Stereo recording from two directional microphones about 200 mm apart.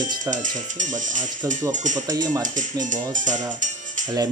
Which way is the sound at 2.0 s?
20° right (ahead or behind).